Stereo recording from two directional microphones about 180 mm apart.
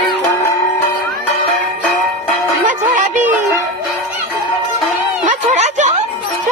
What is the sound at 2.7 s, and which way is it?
Music, 45° right (ahead or behind).